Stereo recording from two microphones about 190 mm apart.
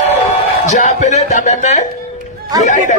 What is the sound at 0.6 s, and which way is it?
Speech, 40° left (ahead or behind).